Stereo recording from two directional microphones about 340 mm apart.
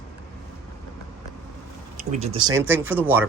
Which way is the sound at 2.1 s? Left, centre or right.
Centre.